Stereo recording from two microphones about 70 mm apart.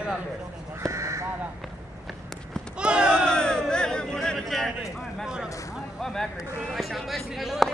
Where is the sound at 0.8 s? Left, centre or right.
Right.